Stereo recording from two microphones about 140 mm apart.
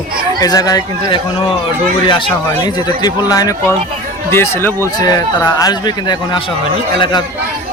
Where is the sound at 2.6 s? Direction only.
25° left (ahead or behind).